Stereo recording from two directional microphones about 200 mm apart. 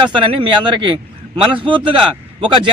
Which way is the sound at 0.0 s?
25° right (ahead or behind).